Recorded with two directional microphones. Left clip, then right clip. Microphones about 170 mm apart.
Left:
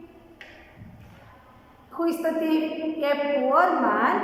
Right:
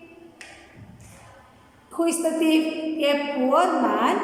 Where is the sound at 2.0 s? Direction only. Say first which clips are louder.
Right 2 dB; 15° right (ahead or behind).